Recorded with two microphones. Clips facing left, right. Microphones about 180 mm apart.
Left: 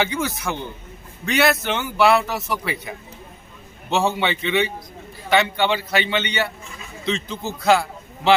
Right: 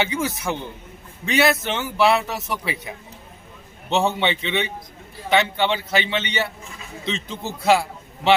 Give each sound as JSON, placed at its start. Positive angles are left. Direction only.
{"t": 0.0, "sound": "a man's voice", "side_deg": 0}